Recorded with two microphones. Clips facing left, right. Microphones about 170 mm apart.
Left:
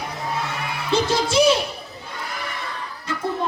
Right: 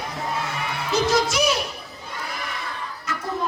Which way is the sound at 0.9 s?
30° left (ahead or behind).